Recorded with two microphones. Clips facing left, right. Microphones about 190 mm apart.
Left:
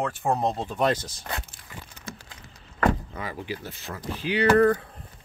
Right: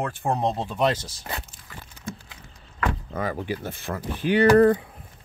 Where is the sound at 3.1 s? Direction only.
50° right (ahead or behind).